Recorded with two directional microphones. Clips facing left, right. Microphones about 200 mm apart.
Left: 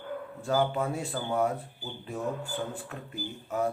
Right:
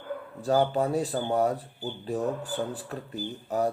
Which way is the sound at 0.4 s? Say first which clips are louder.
Right 4 dB; 35° right (ahead or behind).